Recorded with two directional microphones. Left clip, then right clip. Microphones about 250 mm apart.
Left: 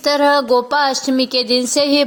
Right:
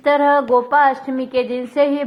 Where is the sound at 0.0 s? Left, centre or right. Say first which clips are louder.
Even; left.